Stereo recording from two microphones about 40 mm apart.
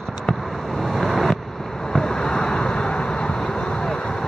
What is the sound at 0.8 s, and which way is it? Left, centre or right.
Vehicle, centre.